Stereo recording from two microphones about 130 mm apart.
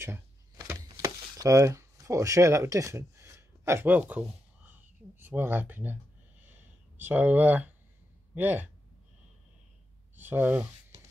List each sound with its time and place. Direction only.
0.0 s a sound: 20° right (ahead or behind)
7.0 s speech: 15° right (ahead or behind)
10.1 s speech: 15° right (ahead or behind)